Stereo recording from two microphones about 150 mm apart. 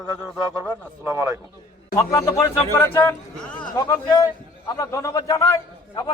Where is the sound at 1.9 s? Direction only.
20° left (ahead or behind).